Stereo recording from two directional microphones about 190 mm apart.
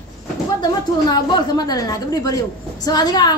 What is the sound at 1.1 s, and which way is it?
A man's voice, 20° left (ahead or behind).